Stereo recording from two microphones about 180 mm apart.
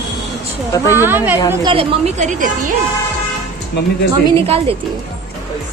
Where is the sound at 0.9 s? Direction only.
10° right (ahead or behind).